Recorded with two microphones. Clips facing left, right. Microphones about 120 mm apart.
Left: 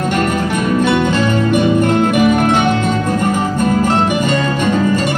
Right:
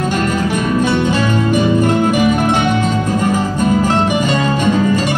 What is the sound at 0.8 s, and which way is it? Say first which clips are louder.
Music: left 1 dB; 55° left (ahead or behind).